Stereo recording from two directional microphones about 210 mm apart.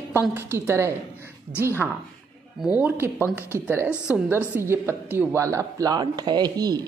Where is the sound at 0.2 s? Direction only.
10° right (ahead or behind).